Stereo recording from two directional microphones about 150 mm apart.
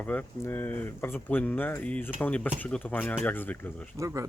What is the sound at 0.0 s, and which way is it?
Speech, 10° left (ahead or behind).